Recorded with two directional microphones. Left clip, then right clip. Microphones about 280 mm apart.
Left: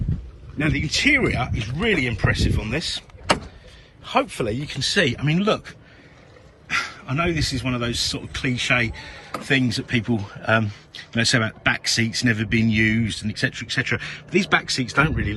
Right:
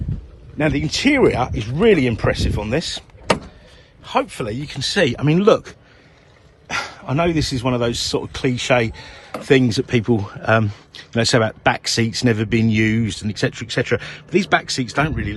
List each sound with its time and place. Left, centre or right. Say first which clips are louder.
0.6 s speech: right 2 dB; centre
4.0 s a man's voice: right 1 dB; centre